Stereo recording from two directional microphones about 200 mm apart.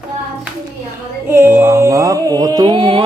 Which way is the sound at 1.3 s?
10° right (ahead or behind).